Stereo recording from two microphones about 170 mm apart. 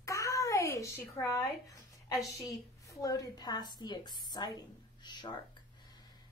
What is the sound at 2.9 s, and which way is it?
A woman's voice, 20° left (ahead or behind).